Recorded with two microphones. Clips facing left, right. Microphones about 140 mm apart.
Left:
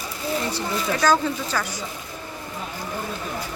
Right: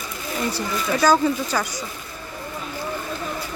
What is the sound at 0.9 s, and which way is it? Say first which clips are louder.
Speech: right 3 dB; 10° right (ahead or behind).